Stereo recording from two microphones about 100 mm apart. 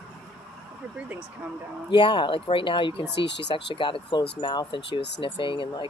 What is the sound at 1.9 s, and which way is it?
Speech, 50° left (ahead or behind).